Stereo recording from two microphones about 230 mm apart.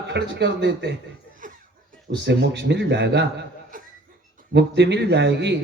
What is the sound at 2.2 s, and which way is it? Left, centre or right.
A man's voice, right.